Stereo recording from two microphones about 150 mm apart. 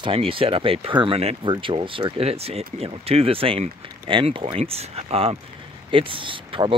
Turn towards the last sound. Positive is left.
turn(degrees=-35)  # may be behind; listen again after turning